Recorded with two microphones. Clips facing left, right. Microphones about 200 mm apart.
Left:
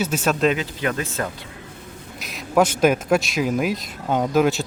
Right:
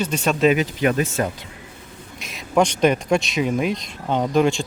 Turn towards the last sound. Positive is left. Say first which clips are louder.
# even
turn(degrees=5)  # may be behind; listen again after turning